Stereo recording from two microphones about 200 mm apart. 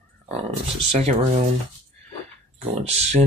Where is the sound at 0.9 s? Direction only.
35° right (ahead or behind).